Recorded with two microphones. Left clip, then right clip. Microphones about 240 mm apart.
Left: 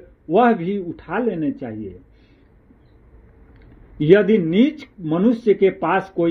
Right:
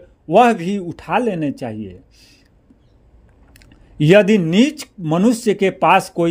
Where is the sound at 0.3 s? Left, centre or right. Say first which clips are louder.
Right 4 dB; right.